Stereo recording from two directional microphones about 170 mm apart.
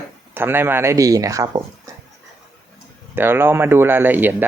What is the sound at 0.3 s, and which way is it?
Speech, 15° right (ahead or behind).